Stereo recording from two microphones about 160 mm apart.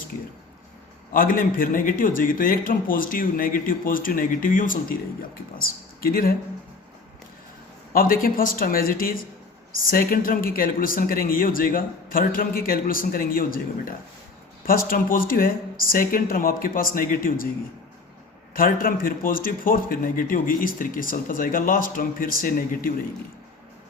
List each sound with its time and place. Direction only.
1.1 s a man's voice: 60° left (ahead or behind)
7.9 s a man's voice: 65° left (ahead or behind)
18.5 s a man's voice: 65° left (ahead or behind)